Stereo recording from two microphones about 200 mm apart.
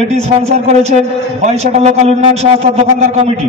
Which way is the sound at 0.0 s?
35° right (ahead or behind).